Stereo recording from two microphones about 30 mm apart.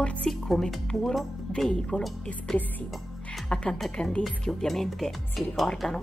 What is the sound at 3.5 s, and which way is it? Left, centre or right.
Speech, left.